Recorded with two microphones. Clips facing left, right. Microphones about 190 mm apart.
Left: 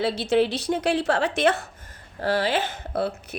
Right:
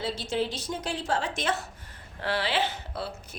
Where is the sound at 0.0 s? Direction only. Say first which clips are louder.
Left 8 dB; 70° left (ahead or behind).